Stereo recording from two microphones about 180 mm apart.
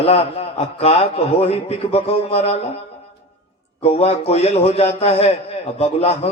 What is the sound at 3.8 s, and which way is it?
A man's voice, 35° left (ahead or behind).